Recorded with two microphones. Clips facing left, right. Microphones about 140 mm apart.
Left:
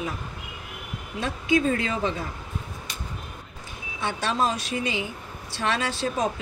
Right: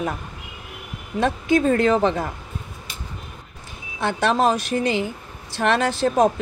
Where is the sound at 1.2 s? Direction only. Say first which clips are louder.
Right 5 dB; 50° right (ahead or behind).